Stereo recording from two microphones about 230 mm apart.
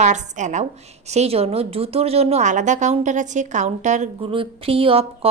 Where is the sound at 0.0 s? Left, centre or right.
Right.